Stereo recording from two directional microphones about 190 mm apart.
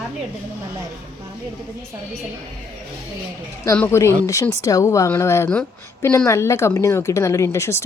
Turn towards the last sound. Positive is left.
turn(degrees=15)  # may be behind; listen again after turning